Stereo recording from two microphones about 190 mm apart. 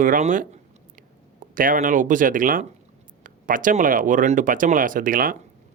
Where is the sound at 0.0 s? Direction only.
40° right (ahead or behind).